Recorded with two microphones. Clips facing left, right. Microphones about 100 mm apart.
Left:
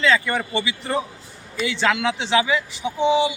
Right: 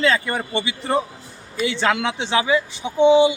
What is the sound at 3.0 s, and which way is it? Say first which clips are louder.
Speech: right 6 dB; 25° right (ahead or behind).